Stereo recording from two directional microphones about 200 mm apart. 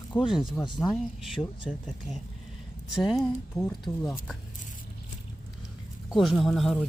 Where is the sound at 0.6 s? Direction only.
20° left (ahead or behind).